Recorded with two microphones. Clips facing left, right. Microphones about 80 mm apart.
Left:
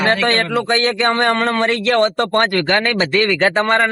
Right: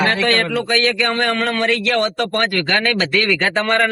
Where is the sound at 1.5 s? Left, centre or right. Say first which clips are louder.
Left 1 dB; left.